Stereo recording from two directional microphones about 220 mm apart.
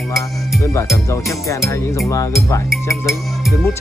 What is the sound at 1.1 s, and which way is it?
Music, 15° left (ahead or behind).